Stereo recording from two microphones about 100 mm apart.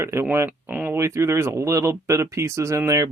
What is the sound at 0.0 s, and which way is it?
Speech, 25° right (ahead or behind).